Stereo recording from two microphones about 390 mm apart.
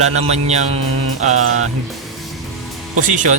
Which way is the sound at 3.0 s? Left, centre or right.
Centre.